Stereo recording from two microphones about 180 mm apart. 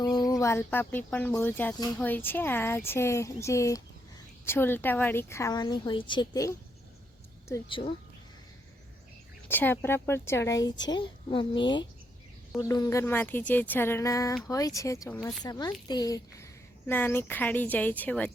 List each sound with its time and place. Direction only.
0.0 s speech: 25° left (ahead or behind)
9.5 s a woman's voice: 10° left (ahead or behind)